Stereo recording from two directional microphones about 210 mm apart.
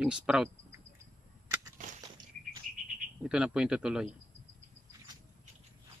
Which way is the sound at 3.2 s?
5° right (ahead or behind).